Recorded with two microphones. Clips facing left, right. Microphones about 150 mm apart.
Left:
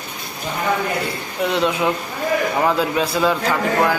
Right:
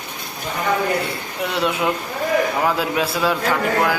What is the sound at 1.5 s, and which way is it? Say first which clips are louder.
A man's voice: left 1 dB; centre (ahead or behind).